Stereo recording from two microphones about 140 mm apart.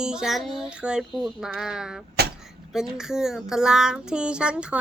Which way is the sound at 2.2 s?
90° right.